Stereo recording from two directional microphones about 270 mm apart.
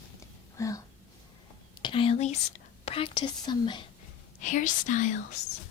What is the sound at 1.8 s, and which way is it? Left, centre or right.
Speech, centre.